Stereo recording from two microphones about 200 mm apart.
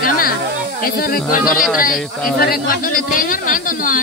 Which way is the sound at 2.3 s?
50° left (ahead or behind).